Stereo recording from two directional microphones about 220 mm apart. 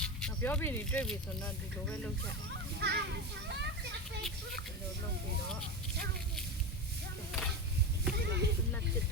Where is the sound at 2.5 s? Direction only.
50° right (ahead or behind).